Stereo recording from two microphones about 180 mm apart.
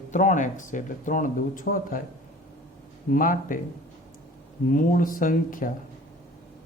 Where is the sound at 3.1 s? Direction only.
50° left (ahead or behind).